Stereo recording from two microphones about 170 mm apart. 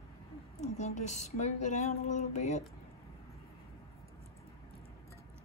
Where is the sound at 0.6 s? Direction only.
45° left (ahead or behind).